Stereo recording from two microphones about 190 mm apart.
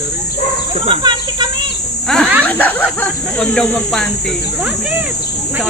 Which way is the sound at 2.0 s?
Centre (ahead or behind).